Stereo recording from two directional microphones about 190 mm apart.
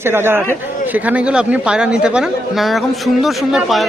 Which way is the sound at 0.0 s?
10° right (ahead or behind).